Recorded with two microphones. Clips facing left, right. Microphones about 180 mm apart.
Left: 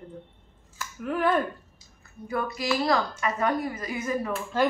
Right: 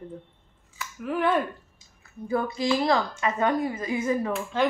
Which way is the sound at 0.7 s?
Centre (ahead or behind).